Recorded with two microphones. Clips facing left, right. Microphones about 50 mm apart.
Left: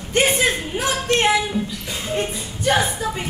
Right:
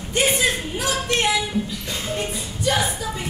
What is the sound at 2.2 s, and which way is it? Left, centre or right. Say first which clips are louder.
Music: left 2 dB; left.